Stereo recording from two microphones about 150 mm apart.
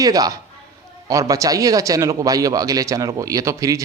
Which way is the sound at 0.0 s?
25° right (ahead or behind).